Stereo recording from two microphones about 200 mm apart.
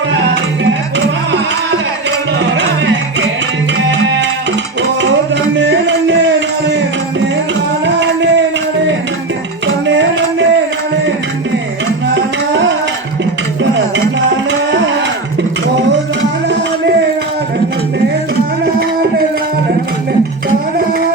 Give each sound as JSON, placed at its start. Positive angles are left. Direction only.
{"t": 0.6, "sound": "music", "side_deg": -70}
{"t": 5.0, "sound": "music", "side_deg": -65}
{"t": 7.9, "sound": "a sound", "side_deg": -65}
{"t": 9.8, "sound": "music", "side_deg": -65}
{"t": 12.1, "sound": "music", "side_deg": -65}